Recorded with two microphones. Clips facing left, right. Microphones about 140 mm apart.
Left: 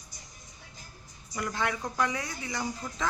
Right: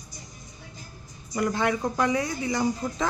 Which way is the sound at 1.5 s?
20° right (ahead or behind).